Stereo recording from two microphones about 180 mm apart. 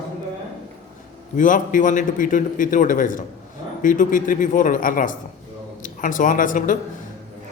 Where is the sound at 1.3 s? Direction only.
45° left (ahead or behind).